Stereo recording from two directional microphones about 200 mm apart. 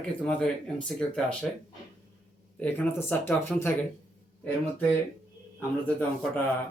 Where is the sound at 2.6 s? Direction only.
10° left (ahead or behind).